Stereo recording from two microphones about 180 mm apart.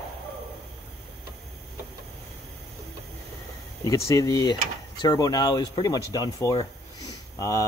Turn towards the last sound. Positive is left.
turn(degrees=20)  # may be behind; listen again after turning